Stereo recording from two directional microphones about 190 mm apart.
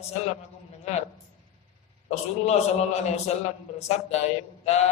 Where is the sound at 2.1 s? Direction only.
35° left (ahead or behind).